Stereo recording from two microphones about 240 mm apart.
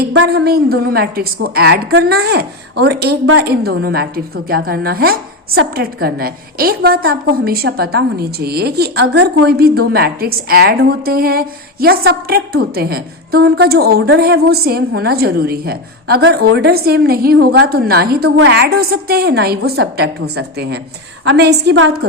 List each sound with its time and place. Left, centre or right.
0.0 s a woman's voice: right